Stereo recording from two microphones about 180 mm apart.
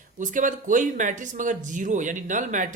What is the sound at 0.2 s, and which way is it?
Speech, 45° right (ahead or behind).